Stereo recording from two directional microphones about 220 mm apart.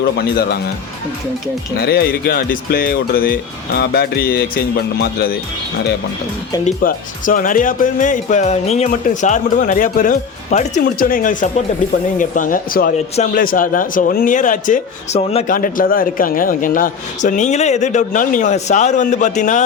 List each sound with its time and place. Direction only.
1.8 s speech: 45° left (ahead or behind)
6.7 s speech: 40° left (ahead or behind)
15.5 s speech: 40° left (ahead or behind)